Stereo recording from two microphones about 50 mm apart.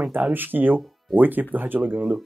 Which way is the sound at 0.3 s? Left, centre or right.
Right.